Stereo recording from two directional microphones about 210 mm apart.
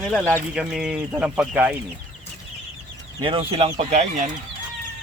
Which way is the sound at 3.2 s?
25° right (ahead or behind).